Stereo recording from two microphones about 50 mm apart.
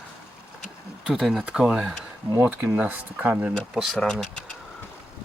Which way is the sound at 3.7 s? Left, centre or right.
Centre.